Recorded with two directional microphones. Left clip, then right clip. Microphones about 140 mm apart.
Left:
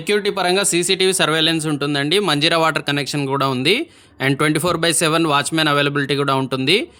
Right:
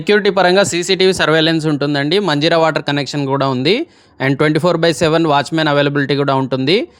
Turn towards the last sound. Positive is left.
turn(degrees=-30)  # may be behind; listen again after turning